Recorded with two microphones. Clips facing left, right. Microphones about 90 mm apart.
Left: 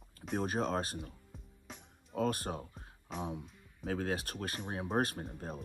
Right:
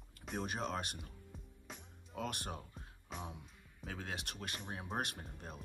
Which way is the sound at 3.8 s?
45° left (ahead or behind).